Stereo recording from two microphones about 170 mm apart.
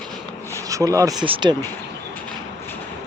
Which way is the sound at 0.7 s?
20° right (ahead or behind).